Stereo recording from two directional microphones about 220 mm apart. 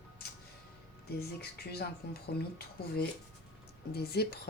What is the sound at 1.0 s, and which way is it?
Speech, 45° left (ahead or behind).